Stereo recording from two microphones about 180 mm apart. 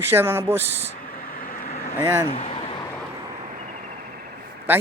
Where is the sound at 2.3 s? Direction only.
35° left (ahead or behind).